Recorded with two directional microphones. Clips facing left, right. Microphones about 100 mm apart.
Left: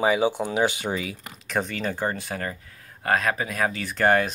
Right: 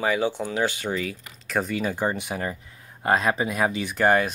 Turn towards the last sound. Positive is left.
turn(degrees=-5)  # may be behind; listen again after turning